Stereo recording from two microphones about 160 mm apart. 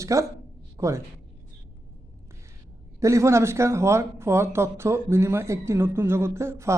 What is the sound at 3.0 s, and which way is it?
A woman's voice, 20° right (ahead or behind).